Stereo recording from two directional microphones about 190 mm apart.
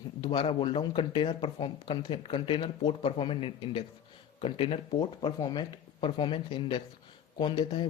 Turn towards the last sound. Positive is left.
turn(degrees=25)  # may be behind; listen again after turning